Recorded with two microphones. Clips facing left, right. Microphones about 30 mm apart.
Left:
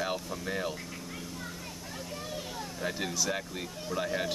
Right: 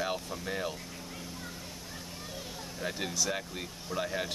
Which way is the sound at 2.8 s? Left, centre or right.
Centre.